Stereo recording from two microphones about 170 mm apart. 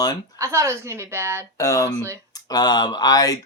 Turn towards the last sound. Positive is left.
turn(degrees=20)  # may be behind; listen again after turning